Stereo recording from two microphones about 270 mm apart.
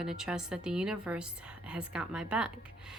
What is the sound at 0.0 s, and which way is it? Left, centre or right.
A woman's voice, centre.